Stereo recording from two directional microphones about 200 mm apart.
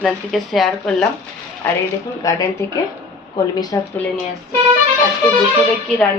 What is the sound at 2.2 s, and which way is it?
Speech, 15° left (ahead or behind).